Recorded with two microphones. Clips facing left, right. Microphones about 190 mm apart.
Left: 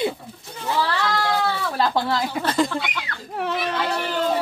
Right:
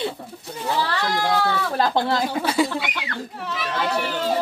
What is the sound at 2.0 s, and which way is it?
Speech, 20° right (ahead or behind).